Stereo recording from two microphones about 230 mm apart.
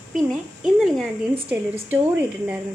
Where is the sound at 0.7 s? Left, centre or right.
Centre.